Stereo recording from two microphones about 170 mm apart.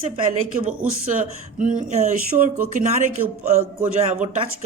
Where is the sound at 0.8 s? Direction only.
50° right (ahead or behind).